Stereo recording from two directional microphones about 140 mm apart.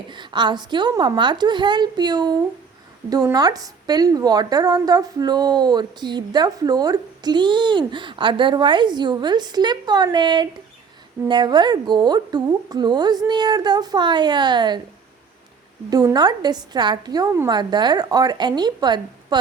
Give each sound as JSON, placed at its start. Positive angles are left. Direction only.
{"t": 0.1, "sound": "a woman's voice", "side_deg": -35}
{"t": 15.9, "sound": "a woman's voice", "side_deg": -25}